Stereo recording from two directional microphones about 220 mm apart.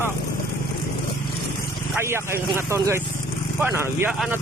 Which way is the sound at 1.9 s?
10° right (ahead or behind).